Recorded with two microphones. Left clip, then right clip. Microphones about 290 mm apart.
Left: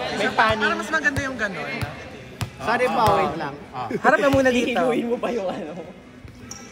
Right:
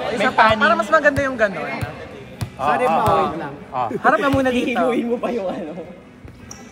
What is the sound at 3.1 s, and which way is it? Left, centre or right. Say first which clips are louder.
Speech: right 3 dB; left.